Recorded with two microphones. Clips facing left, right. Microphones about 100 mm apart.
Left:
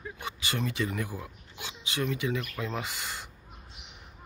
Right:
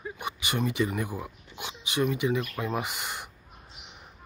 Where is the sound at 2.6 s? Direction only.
20° right (ahead or behind).